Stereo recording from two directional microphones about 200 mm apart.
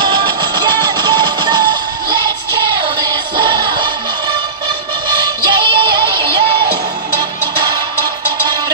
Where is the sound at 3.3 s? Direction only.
25° right (ahead or behind).